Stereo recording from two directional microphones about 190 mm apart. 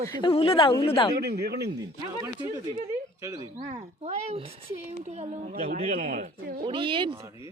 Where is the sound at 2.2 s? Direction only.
20° right (ahead or behind).